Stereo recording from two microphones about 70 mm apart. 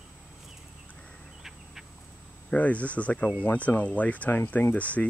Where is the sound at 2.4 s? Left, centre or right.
Left.